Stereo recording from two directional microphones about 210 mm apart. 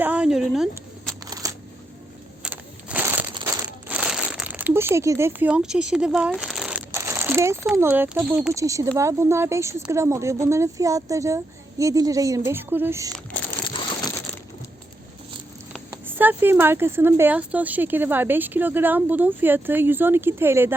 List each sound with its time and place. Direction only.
0.0 s a sound: 5° right (ahead or behind)
1.2 s a sound: 15° right (ahead or behind)
3.4 s crumpling: 15° right (ahead or behind)
3.7 s crumpling: 5° right (ahead or behind)
7.7 s speech: 10° right (ahead or behind)
13.7 s crumpling: 20° left (ahead or behind)
14.3 s crushing: 5° left (ahead or behind)
16.1 s speech: 10° right (ahead or behind)